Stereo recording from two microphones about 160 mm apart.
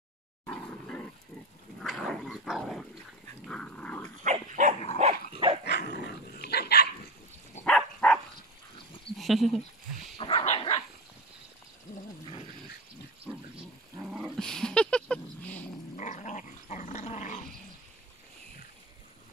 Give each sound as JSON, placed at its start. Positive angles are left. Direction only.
{"t": 0.5, "sound": "roar", "side_deg": 10}
{"t": 1.8, "sound": "dog", "side_deg": 0}
{"t": 4.2, "sound": "dog", "side_deg": -50}
{"t": 5.7, "sound": "dog", "side_deg": 90}
{"t": 7.6, "sound": "a sound", "side_deg": 5}
{"t": 9.2, "sound": "speech", "side_deg": 0}
{"t": 10.1, "sound": "dog", "side_deg": 40}
{"t": 14.1, "sound": "dog", "side_deg": 0}
{"t": 16.0, "sound": "dog", "side_deg": 50}